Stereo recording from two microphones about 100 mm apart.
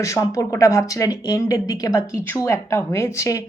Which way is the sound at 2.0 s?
25° left (ahead or behind).